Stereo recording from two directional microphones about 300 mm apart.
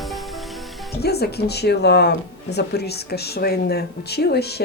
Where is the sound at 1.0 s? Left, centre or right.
Left.